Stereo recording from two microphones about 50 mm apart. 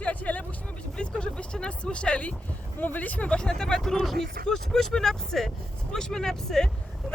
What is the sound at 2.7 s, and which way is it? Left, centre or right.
Speech, left.